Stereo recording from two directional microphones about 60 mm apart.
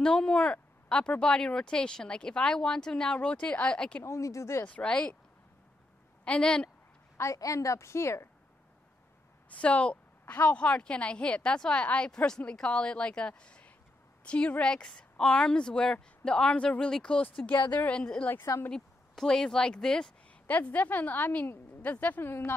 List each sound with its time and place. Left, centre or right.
0.0 s a woman's voice: centre
4.0 s a woman's voice: left
4.6 s a woman's voice: centre
6.2 s a woman's voice: centre
7.3 s a woman's voice: left
9.5 s a woman's voice: left
17.5 s a woman's voice: left
18.4 s speech: left
18.7 s speech: centre
20.4 s a woman's voice: left